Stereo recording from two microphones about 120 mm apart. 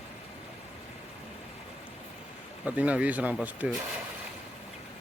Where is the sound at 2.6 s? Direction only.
10° right (ahead or behind).